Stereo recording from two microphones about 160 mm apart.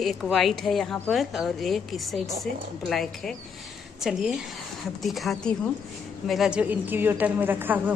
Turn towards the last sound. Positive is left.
turn(degrees=-10)  # may be behind; listen again after turning